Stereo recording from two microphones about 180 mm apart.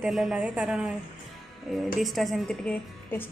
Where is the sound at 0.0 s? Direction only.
5° right (ahead or behind).